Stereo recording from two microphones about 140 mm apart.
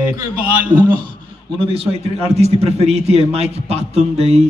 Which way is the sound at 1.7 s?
45° right (ahead or behind).